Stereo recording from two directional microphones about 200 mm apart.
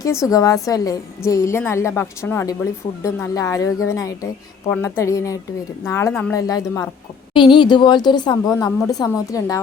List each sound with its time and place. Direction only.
0.0 s a woman's voice: 15° left (ahead or behind)